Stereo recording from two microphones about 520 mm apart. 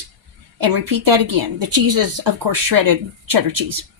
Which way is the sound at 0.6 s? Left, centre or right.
Right.